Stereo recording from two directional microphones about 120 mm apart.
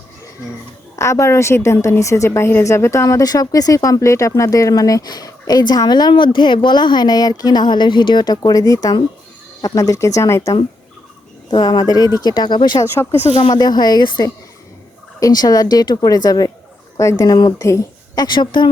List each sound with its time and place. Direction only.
0.9 s a woman's voice: 25° left (ahead or behind)
12.8 s speech: 20° left (ahead or behind)
13.1 s speech: 70° left (ahead or behind)
13.4 s a woman's voice: 35° left (ahead or behind)